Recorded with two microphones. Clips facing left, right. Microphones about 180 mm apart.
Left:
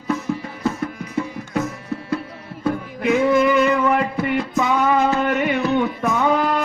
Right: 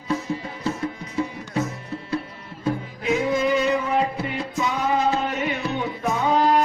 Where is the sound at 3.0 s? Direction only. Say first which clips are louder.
Left 6 dB; 65° left (ahead or behind).